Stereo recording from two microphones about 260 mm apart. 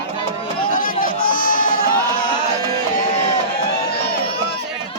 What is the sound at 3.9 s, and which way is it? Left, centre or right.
Crowd, left.